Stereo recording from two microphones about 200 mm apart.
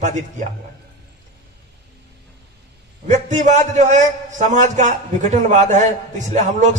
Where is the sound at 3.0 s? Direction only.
35° right (ahead or behind).